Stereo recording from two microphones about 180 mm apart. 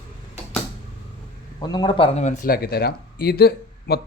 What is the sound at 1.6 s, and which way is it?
Speech, 25° left (ahead or behind).